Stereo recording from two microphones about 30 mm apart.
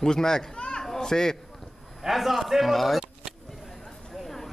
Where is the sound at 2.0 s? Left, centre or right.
Centre.